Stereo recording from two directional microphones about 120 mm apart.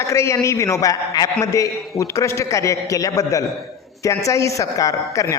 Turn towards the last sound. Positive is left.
turn(degrees=25)  # may be behind; listen again after turning